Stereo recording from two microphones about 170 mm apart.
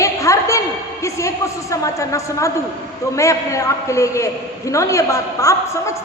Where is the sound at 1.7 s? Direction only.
20° left (ahead or behind).